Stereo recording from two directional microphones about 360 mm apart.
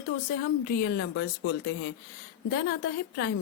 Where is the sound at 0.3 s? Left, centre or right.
Left.